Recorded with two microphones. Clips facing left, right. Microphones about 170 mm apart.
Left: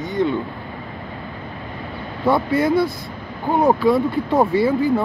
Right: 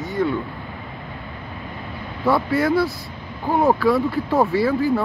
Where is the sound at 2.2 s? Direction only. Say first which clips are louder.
Left 1 dB; 20° left (ahead or behind).